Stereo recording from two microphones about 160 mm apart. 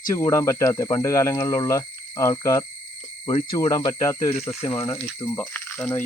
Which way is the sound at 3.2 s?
35° left (ahead or behind).